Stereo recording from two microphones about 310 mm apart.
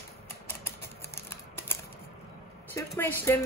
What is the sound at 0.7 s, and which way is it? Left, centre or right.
Typewriter, centre.